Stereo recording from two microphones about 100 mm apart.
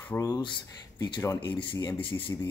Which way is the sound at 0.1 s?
20° left (ahead or behind).